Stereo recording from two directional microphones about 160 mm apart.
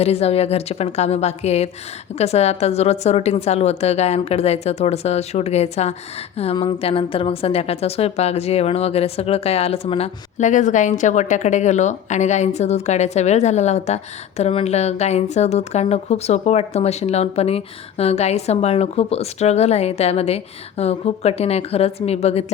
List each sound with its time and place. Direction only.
0.0 s a woman's voice: 40° left (ahead or behind)